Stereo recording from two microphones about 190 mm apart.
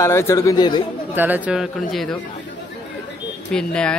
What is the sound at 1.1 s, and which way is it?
Speech, 10° right (ahead or behind).